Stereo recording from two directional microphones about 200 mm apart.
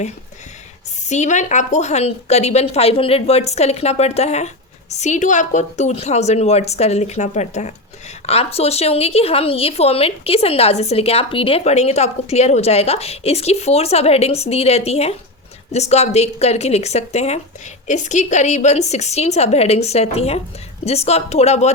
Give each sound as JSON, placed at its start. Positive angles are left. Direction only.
{"t": 1.0, "sound": "a woman's voice", "side_deg": 35}